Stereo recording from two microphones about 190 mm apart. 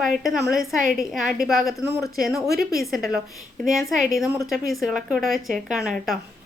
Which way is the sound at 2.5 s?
55° right (ahead or behind).